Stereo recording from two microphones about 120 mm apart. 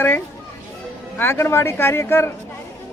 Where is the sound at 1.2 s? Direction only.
20° left (ahead or behind).